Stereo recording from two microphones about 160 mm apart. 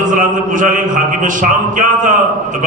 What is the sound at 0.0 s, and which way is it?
A man's voice, 55° right (ahead or behind).